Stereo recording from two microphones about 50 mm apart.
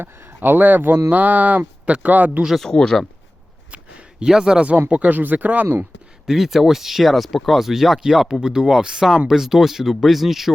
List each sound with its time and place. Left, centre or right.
0.3 s speech: right
1.1 s speech: right
2.6 s speech: centre
3.7 s a sound: right
4.3 s speech: centre
5.0 s speech: right
6.2 s speech: centre